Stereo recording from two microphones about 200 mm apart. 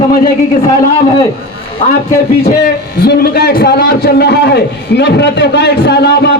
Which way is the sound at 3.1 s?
50° left (ahead or behind).